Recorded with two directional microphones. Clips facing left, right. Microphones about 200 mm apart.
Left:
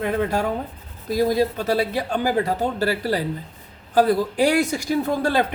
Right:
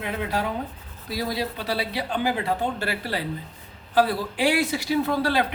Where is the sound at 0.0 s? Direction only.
45° left (ahead or behind).